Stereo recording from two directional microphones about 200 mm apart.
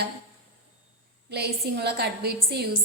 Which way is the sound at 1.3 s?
55° right (ahead or behind).